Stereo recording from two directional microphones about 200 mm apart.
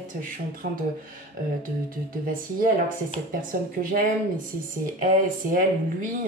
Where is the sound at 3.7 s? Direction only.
45° right (ahead or behind).